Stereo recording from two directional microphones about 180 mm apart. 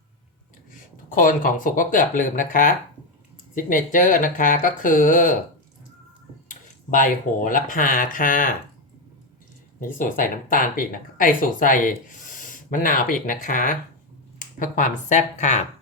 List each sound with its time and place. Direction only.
1.2 s speech: 50° left (ahead or behind)
6.5 s speech: 45° left (ahead or behind)
9.8 s speech: 50° left (ahead or behind)